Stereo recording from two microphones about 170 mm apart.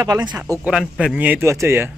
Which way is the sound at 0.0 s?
25° right (ahead or behind).